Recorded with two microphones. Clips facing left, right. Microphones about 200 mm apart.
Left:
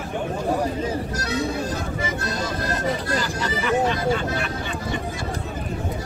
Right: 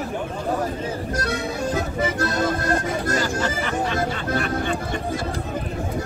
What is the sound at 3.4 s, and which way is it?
Vehicle, 45° right (ahead or behind).